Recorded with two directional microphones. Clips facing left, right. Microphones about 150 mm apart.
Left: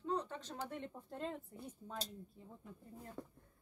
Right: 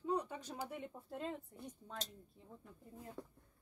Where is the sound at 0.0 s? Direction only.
10° right (ahead or behind).